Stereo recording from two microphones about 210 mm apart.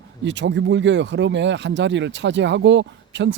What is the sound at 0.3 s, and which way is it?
Speech, 60° right (ahead or behind).